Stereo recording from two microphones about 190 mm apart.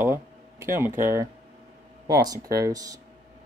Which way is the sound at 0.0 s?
15° right (ahead or behind).